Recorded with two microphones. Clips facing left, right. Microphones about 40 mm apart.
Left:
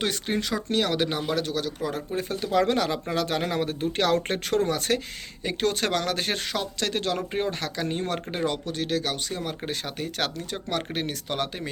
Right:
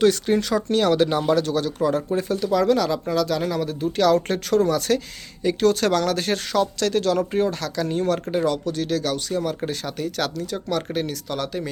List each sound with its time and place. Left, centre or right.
0.0 s speech: centre
2.1 s speech: centre
2.4 s speech: left